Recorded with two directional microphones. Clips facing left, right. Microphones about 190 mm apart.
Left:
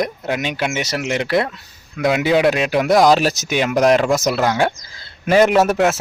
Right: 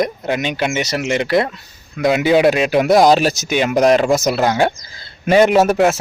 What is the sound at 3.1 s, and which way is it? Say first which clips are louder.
Speech: right 2 dB; centre (ahead or behind).